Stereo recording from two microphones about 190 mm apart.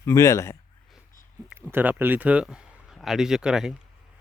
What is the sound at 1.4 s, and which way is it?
Speech, 5° right (ahead or behind).